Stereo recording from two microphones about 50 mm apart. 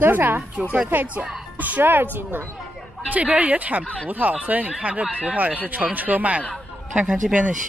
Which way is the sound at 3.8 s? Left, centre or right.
Left.